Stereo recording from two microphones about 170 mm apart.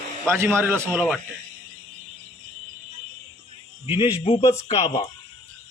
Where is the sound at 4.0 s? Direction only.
35° left (ahead or behind).